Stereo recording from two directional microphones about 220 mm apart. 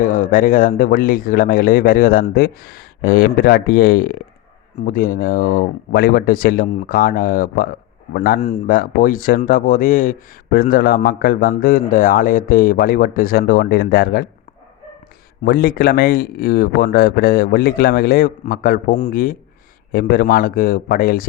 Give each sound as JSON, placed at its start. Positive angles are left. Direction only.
{"t": 0.0, "sound": "speech", "side_deg": 35}
{"t": 15.4, "sound": "speech", "side_deg": 40}